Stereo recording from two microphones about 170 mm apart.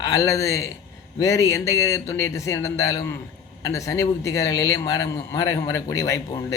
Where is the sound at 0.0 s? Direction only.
20° left (ahead or behind).